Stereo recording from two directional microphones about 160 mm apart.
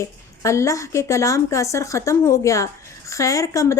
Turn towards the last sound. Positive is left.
turn(degrees=20)  # may be behind; listen again after turning